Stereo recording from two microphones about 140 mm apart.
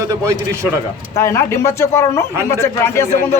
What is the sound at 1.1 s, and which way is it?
Speech, 20° left (ahead or behind).